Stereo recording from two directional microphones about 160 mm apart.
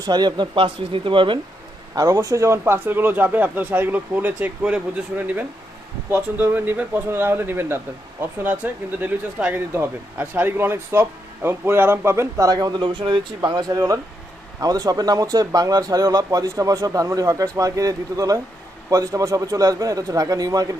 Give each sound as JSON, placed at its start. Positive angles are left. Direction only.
{"t": 0.0, "sound": "speech", "side_deg": -25}